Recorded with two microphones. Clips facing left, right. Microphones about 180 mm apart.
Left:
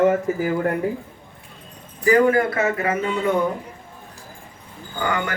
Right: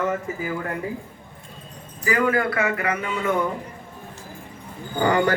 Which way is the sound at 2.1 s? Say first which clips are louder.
Left 5 dB; 35° left (ahead or behind).